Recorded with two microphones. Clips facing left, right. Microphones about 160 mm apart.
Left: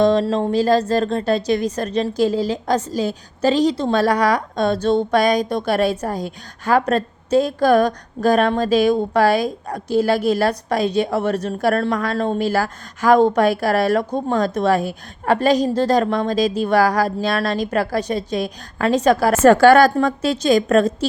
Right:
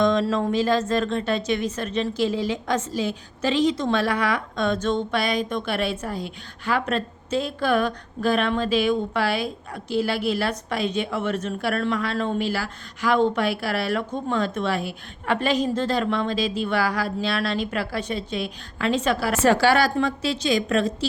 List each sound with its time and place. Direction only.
0.0 s a woman's voice: 35° left (ahead or behind)